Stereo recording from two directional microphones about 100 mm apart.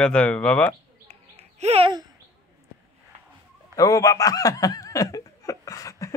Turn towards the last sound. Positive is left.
turn(degrees=35)  # may be behind; listen again after turning